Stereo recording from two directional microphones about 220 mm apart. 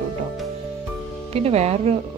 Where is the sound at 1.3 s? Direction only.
30° right (ahead or behind).